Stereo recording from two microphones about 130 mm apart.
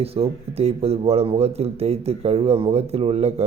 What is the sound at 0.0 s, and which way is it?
A man's voice, 50° right (ahead or behind).